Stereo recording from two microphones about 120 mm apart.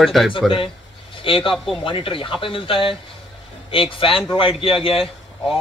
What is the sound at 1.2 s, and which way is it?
Speech, 45° left (ahead or behind).